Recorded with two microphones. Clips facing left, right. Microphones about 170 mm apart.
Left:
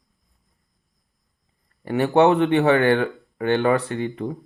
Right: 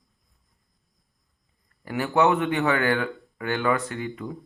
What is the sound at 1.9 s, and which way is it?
A man's voice, 30° left (ahead or behind).